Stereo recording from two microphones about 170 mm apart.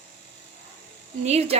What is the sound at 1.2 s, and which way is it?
Speech, 40° right (ahead or behind).